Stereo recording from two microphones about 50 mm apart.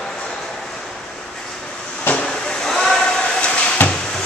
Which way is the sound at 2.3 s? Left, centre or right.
Centre.